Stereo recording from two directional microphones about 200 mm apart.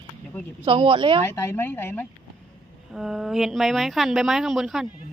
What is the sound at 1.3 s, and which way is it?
Speech, 10° left (ahead or behind).